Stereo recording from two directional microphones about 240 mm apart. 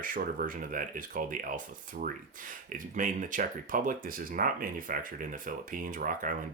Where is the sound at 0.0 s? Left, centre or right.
Right.